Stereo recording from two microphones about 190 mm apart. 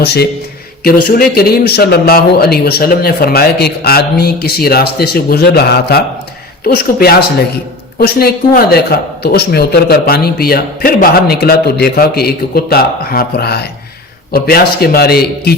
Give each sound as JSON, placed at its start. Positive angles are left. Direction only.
{"t": 0.0, "sound": "a man's voice", "side_deg": 60}